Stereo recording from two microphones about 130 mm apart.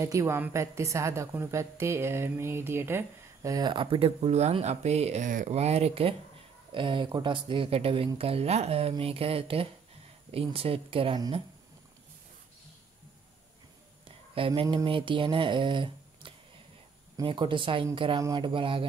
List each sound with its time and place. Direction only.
0.0 s a woman's voice: 25° right (ahead or behind)
3.5 s speech: 35° right (ahead or behind)
6.7 s speech: 40° right (ahead or behind)
14.0 s a sound: 45° right (ahead or behind)
14.9 s speech: 40° right (ahead or behind)